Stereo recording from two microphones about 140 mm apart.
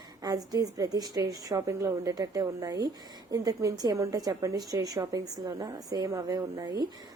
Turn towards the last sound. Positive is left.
turn(degrees=-25)  # may be behind; listen again after turning